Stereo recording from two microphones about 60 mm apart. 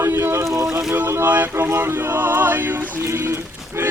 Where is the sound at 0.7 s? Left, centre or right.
Centre.